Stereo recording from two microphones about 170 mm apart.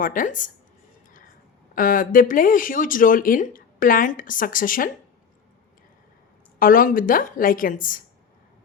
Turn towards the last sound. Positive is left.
turn(degrees=55)  # may be behind; listen again after turning